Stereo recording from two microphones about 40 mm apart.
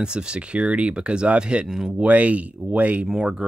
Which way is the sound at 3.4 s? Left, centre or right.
Centre.